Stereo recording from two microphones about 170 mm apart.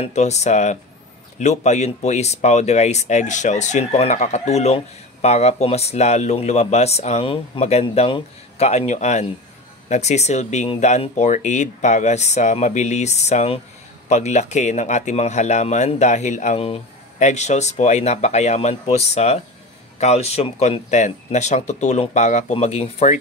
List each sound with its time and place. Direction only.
0.0 s speech: 40° left (ahead or behind)